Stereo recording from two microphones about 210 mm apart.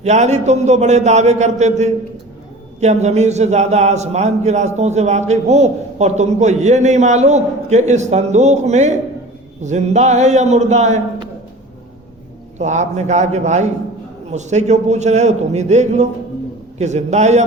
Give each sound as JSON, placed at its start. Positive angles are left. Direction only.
{"t": 0.0, "sound": "a man's voice", "side_deg": -35}
{"t": 12.5, "sound": "a man's voice", "side_deg": -35}